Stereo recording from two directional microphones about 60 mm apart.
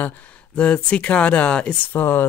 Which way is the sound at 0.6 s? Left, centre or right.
Centre.